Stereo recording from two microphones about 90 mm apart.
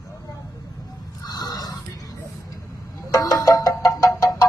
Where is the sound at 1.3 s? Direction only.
45° left (ahead or behind).